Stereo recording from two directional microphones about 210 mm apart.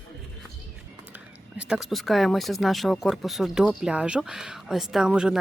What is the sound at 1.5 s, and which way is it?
Speech, 5° right (ahead or behind).